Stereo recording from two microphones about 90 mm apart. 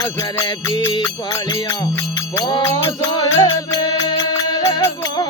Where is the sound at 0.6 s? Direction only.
45° left (ahead or behind).